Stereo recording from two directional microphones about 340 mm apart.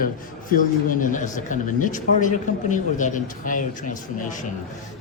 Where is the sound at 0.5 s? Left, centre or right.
Left.